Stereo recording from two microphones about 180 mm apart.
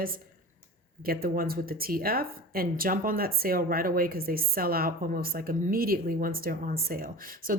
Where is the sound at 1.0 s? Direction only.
55° right (ahead or behind).